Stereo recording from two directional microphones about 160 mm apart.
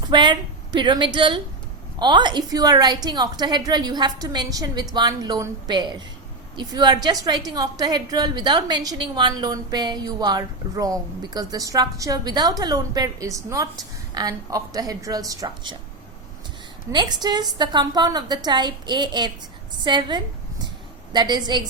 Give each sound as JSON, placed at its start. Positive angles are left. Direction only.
{"t": 0.1, "sound": "a woman's voice", "side_deg": -30}
{"t": 16.9, "sound": "a woman's voice", "side_deg": -25}